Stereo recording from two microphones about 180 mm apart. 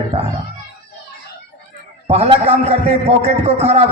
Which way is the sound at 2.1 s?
35° right (ahead or behind).